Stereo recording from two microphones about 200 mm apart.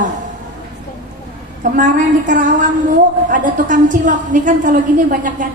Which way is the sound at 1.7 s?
40° right (ahead or behind).